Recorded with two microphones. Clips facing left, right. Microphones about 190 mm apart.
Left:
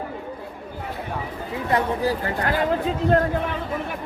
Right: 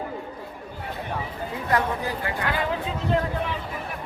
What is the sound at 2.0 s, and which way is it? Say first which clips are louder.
Speech: left 5 dB; 40° left (ahead or behind).